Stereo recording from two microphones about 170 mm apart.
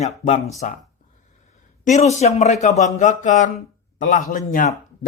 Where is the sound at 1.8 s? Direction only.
40° left (ahead or behind).